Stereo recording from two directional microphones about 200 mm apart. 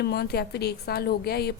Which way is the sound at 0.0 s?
55° left (ahead or behind).